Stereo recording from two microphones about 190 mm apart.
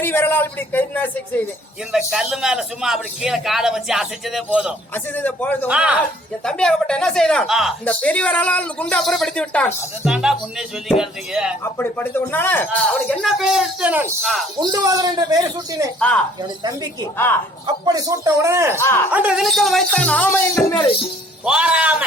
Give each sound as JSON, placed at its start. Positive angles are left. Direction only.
{"t": 0.0, "sound": "speech", "side_deg": 10}
{"t": 1.9, "sound": "speech", "side_deg": -5}
{"t": 5.1, "sound": "speech", "side_deg": 10}
{"t": 5.6, "sound": "speech", "side_deg": -5}
{"t": 11.6, "sound": "speech", "side_deg": 10}
{"t": 14.6, "sound": "speech", "side_deg": -20}
{"t": 16.0, "sound": "speech", "side_deg": 5}
{"t": 17.7, "sound": "a man's voice", "side_deg": -20}
{"t": 18.8, "sound": "speech", "side_deg": 10}
{"t": 19.1, "sound": "speech", "side_deg": -5}
{"t": 21.4, "sound": "speech", "side_deg": -5}